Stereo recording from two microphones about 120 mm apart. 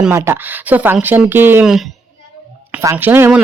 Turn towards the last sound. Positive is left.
turn(degrees=-20)  # may be behind; listen again after turning